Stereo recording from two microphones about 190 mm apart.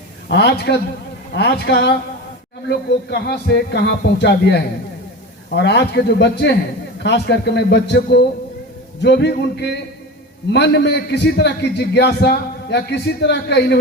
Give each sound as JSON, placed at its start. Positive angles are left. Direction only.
{"t": 0.3, "sound": "a man's voice", "side_deg": 60}